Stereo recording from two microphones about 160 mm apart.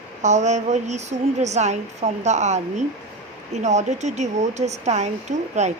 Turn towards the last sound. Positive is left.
turn(degrees=-45)  # may be behind; listen again after turning